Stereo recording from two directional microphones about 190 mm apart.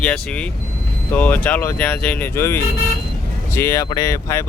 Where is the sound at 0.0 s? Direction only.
5° left (ahead or behind).